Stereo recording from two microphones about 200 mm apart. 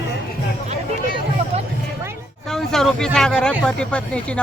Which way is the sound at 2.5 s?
Centre (ahead or behind).